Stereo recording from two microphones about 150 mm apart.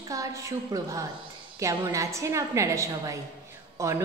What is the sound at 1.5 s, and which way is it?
A woman's voice, 20° right (ahead or behind).